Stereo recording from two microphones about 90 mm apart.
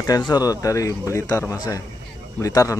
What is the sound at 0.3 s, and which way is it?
Speech, 45° left (ahead or behind).